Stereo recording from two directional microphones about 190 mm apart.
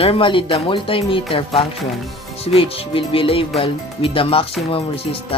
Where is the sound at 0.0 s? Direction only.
30° left (ahead or behind).